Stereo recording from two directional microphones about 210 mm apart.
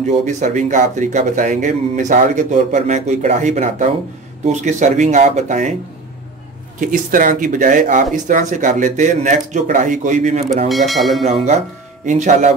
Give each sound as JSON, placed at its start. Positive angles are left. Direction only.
{"t": 0.3, "sound": "speech", "side_deg": -35}
{"t": 6.8, "sound": "speech", "side_deg": -40}
{"t": 10.7, "sound": "speech", "side_deg": 0}
{"t": 11.2, "sound": "speech", "side_deg": -30}